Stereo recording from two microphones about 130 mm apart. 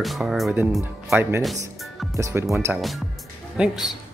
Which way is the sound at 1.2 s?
20° right (ahead or behind).